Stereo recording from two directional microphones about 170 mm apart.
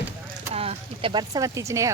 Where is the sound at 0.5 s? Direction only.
35° right (ahead or behind); by 1.9 s 20° right (ahead or behind).